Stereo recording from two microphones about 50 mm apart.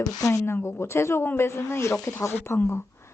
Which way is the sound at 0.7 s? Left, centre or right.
Left.